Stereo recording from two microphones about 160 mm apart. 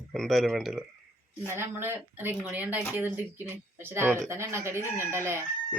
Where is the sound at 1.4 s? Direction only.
15° right (ahead or behind).